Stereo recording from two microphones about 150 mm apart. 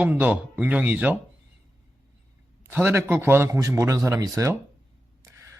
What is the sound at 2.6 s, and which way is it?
Speech, 15° right (ahead or behind).